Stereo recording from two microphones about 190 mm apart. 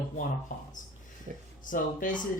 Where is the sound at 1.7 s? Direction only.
45° left (ahead or behind).